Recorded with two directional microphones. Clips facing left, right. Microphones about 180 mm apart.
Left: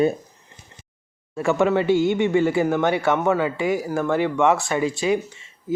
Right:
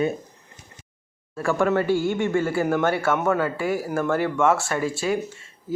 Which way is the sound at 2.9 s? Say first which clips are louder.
Left 2 dB; 15° left (ahead or behind).